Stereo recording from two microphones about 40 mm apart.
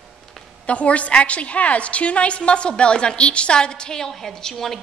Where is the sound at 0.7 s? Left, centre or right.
Left.